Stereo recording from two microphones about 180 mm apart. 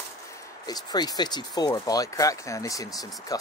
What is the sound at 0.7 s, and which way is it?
Speech, 20° left (ahead or behind).